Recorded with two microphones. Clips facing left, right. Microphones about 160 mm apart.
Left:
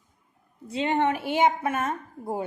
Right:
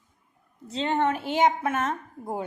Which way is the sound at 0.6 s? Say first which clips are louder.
Left 1 dB; 10° left (ahead or behind).